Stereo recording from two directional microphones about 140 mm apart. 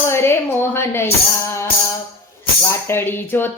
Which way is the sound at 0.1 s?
20° left (ahead or behind).